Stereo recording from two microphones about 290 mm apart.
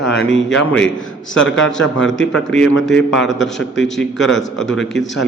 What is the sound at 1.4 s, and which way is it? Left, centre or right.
Speech, left.